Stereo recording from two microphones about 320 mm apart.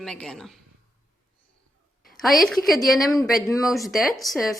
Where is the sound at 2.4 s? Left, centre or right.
Centre.